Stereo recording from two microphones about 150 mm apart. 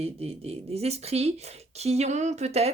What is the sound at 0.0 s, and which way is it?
Speech, 45° right (ahead or behind).